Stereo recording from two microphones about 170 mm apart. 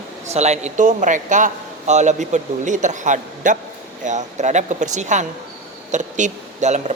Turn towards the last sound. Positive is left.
turn(degrees=-45)  # may be behind; listen again after turning